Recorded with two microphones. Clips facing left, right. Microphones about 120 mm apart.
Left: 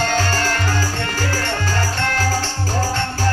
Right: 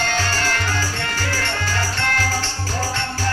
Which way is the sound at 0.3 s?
45° left (ahead or behind).